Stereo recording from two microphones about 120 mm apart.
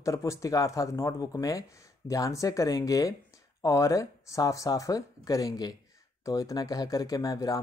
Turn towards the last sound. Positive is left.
turn(degrees=30)  # may be behind; listen again after turning